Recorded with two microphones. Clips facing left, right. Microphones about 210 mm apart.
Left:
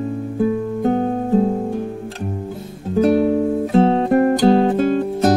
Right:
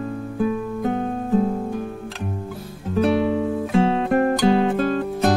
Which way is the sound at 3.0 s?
45° left (ahead or behind).